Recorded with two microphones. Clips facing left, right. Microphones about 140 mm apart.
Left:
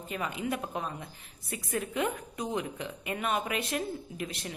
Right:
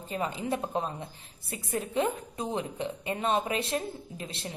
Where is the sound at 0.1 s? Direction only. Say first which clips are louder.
Right 2 dB; 30° right (ahead or behind).